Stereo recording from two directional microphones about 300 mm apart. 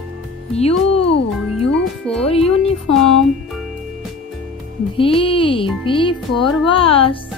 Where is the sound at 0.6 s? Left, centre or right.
Centre.